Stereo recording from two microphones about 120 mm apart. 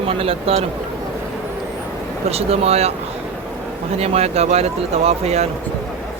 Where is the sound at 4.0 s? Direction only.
60° right (ahead or behind).